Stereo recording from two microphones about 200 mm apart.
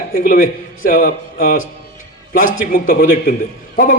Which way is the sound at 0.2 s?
45° left (ahead or behind).